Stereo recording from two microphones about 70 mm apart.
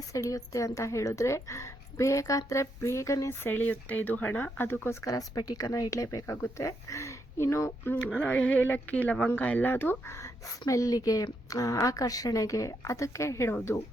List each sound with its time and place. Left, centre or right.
0.1 s a woman's voice: left
3.4 s speech: left
5.0 s a woman's voice: left
6.3 s a woman's voice: left
8.0 s speech: left
10.7 s a woman's voice: left